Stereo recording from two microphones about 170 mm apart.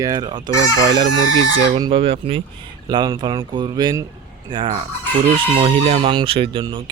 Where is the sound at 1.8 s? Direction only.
30° right (ahead or behind).